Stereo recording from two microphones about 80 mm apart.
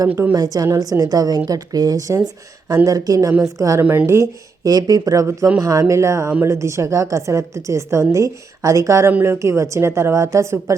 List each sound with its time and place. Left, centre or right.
0.3 s a woman's voice: right
3.8 s speech: right
4.6 s a woman's voice: right